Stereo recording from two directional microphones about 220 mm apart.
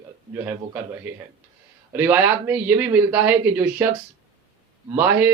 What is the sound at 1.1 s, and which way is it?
A man's voice, 5° right (ahead or behind).